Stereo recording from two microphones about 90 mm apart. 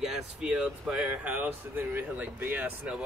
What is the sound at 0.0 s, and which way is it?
Speech, 5° right (ahead or behind).